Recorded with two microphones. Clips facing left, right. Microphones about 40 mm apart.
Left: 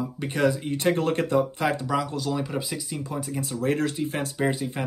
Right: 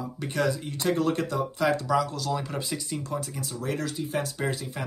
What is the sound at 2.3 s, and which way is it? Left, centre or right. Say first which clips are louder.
Speech: left 2 dB; centre.